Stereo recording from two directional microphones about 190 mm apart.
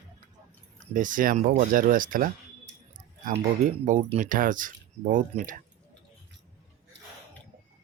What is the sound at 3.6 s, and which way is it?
Speech, 40° right (ahead or behind).